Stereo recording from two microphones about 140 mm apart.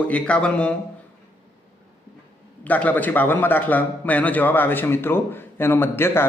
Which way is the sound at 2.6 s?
10° left (ahead or behind).